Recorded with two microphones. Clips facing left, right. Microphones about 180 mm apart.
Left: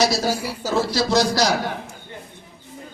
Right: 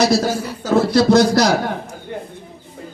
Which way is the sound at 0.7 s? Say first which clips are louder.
Right 7 dB; 60° right (ahead or behind).